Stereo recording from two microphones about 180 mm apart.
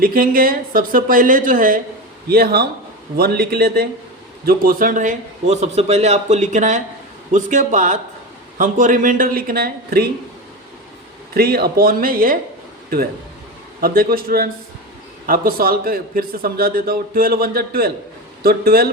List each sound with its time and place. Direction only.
0.0 s a man's voice: 55° right (ahead or behind)
11.3 s a man's voice: 60° right (ahead or behind)
13.8 s a man's voice: 55° right (ahead or behind)